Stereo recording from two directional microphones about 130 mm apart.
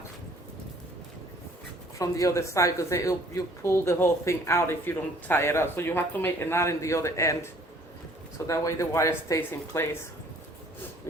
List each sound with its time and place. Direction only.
2.0 s speech: 25° left (ahead or behind)